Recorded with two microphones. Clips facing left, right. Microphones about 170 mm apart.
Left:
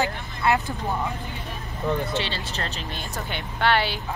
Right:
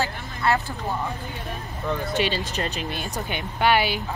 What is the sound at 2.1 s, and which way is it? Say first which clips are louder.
Speech: right 4 dB; 15° right (ahead or behind).